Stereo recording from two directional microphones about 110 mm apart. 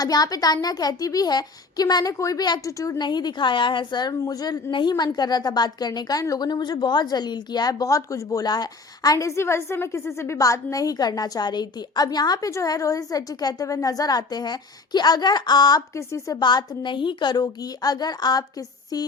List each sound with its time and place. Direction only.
0.0 s a woman's voice: 35° left (ahead or behind)
16.0 s a woman's voice: 30° left (ahead or behind)
16.4 s a woman's voice: 40° left (ahead or behind)